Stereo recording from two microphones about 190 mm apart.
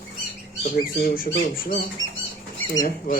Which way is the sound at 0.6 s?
50° left (ahead or behind).